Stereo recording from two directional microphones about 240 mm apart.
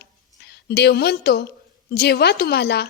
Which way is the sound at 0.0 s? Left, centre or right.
Left.